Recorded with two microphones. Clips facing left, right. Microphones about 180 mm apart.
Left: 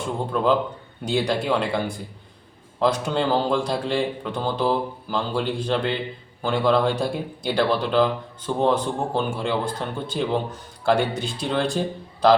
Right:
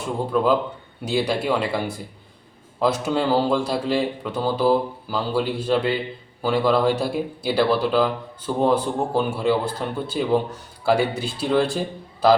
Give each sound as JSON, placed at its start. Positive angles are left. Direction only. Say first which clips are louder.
{"t": 0.3, "sound": "speech", "louder": "right 1 dB", "side_deg": -5}